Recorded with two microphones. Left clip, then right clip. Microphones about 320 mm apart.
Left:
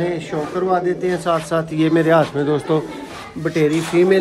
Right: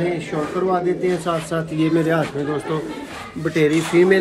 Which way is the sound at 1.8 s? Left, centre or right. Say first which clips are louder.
Left 5 dB; left.